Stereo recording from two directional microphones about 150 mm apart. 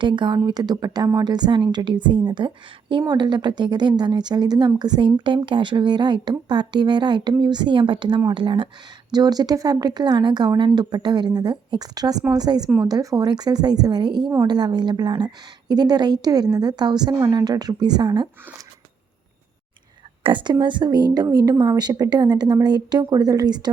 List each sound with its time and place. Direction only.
0.0 s a woman's voice: 30° right (ahead or behind)
20.2 s a woman's voice: 30° right (ahead or behind)